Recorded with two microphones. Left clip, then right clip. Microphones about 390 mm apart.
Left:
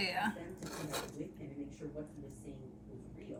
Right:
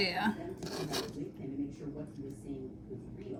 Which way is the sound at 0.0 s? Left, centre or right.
Centre.